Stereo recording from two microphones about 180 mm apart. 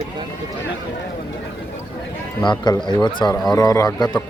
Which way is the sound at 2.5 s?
25° left (ahead or behind).